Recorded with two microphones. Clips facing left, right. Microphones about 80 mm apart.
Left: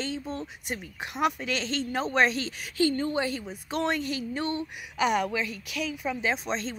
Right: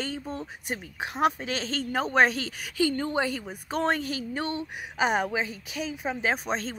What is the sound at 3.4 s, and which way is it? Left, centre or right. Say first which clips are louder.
Speech: right 1 dB; right.